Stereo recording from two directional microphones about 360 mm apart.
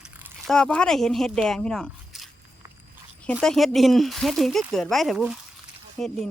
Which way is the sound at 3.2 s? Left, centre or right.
Centre.